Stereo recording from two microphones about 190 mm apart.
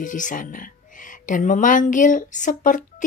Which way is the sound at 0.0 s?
45° left (ahead or behind).